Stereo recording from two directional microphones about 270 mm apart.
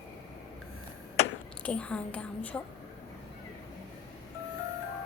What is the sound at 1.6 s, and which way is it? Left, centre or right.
Speech, centre.